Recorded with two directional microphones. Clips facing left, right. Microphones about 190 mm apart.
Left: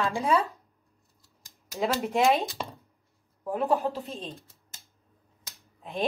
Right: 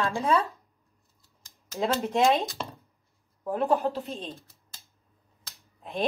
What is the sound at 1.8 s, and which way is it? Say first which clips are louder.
Speech: right 1 dB; centre (ahead or behind).